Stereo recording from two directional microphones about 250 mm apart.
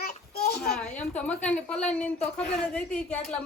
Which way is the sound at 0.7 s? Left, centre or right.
Centre.